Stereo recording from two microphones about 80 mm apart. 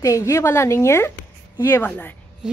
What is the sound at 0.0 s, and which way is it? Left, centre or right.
Speech, left.